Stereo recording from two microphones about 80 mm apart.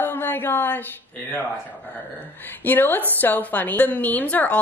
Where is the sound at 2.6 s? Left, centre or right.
Left.